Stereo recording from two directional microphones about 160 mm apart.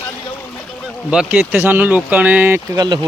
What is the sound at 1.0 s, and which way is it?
Speech, 5° right (ahead or behind).